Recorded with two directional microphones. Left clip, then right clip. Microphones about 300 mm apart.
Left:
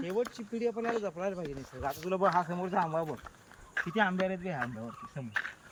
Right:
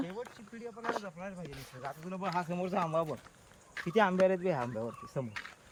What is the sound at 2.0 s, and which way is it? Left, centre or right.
Speech, left.